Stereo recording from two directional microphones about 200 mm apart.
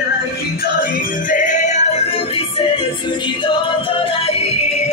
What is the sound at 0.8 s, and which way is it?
Music, 40° left (ahead or behind).